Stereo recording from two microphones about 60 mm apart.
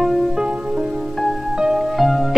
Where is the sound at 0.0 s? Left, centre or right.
Centre.